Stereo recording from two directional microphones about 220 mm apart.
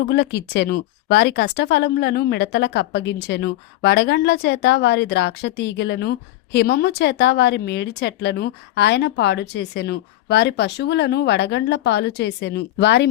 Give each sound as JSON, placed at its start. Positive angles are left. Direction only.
{"t": 0.1, "sound": "speech", "side_deg": 50}